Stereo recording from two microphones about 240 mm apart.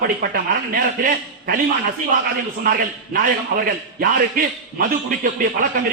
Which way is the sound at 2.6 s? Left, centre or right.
Right.